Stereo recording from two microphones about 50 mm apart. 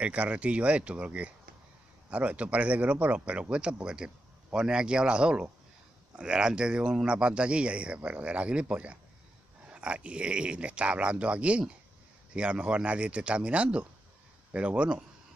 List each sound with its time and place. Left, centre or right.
0.0 s speech: right